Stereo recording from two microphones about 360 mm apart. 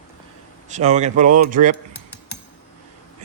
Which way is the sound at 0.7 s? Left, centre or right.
Centre.